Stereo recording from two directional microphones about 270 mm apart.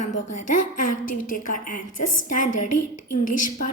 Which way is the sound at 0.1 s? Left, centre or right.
Left.